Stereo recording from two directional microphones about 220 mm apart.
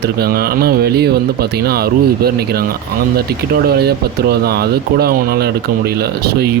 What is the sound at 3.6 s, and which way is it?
Speech, 45° right (ahead or behind).